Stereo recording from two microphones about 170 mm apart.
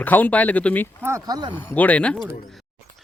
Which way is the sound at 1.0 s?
20° right (ahead or behind).